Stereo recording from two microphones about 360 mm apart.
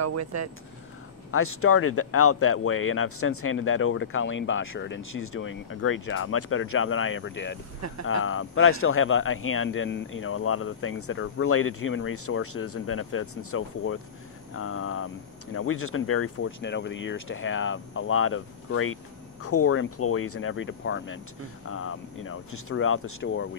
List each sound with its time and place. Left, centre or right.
0.0 s speech: right
1.3 s speech: left